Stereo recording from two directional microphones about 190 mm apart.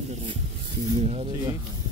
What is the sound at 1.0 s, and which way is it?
Speech, 35° right (ahead or behind).